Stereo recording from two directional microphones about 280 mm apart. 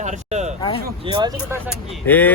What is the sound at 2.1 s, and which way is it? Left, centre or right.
Speech, centre.